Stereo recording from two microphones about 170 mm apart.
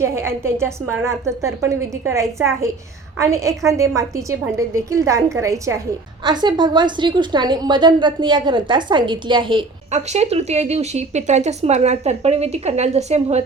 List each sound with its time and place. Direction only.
0.0 s a woman's voice: 15° right (ahead or behind)
9.9 s speech: 40° right (ahead or behind)